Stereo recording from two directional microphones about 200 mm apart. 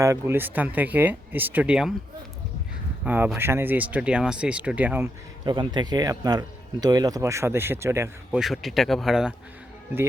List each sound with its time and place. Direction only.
0.0 s speech: 15° right (ahead or behind)
3.0 s speech: 10° right (ahead or behind)
5.5 s speech: 20° right (ahead or behind)
8.4 s speech: centre (ahead or behind)